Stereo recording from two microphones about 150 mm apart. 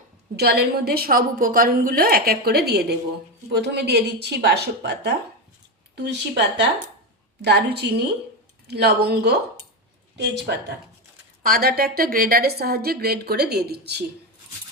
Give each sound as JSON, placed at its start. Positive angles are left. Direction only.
{"t": 0.3, "sound": "a woman's voice", "side_deg": -90}
{"t": 11.4, "sound": "a woman's voice", "side_deg": -85}